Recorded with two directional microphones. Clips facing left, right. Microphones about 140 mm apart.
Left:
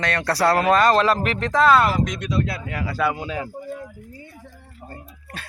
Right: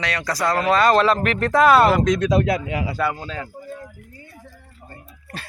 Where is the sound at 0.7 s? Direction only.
40° left (ahead or behind).